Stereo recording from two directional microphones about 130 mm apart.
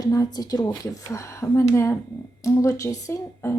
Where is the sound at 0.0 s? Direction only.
30° left (ahead or behind).